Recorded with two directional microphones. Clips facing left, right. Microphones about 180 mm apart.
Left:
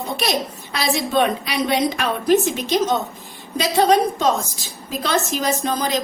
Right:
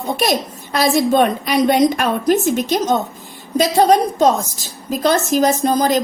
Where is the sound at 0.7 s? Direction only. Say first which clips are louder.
Right 6 dB; 45° right (ahead or behind).